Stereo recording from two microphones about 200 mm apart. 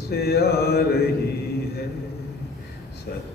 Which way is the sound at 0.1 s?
50° left (ahead or behind).